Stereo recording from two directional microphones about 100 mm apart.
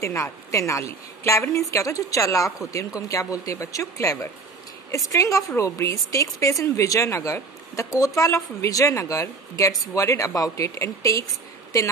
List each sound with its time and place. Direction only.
0.0 s a woman's voice: 30° left (ahead or behind)